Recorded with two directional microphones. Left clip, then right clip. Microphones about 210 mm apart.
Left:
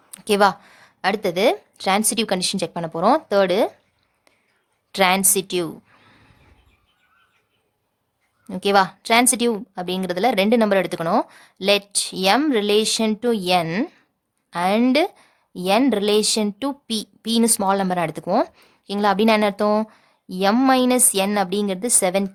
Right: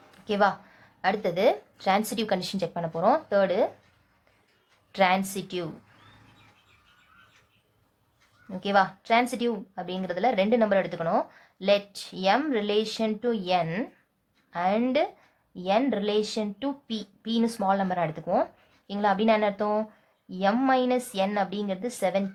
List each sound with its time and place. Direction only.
0.1 s speech: 50° left (ahead or behind)
4.9 s speech: 45° left (ahead or behind)
8.4 s speech: 50° left (ahead or behind)